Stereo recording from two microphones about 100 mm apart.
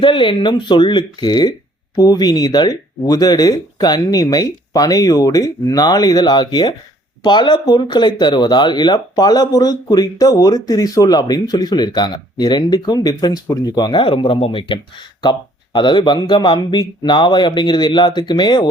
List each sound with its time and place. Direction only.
0.0 s speech: 55° left (ahead or behind)
14.0 s speech: 60° left (ahead or behind)